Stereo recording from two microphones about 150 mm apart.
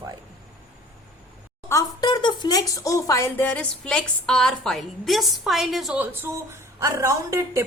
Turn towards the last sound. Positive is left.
turn(degrees=-20)  # may be behind; listen again after turning